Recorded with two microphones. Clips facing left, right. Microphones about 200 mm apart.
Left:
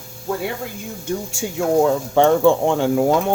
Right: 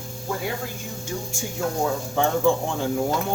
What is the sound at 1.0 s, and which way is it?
Speech, 75° left (ahead or behind).